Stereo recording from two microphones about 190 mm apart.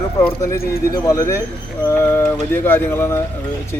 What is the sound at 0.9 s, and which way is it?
Speech, 20° left (ahead or behind).